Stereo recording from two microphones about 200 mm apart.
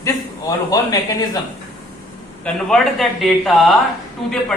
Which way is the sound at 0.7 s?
15° left (ahead or behind).